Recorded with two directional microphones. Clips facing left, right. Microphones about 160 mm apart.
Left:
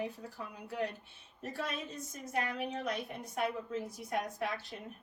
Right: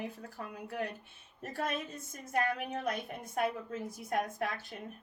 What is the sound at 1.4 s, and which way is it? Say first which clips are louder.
A woman's voice: right 3 dB; 50° right (ahead or behind).